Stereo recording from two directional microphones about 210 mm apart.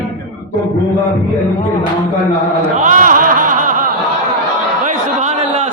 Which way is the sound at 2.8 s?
40° right (ahead or behind).